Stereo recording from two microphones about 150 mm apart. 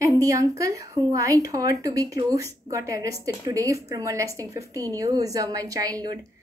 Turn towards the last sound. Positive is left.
turn(degrees=-25)  # may be behind; listen again after turning